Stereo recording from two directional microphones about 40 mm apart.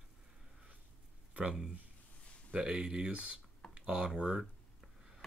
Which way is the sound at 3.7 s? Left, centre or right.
Right.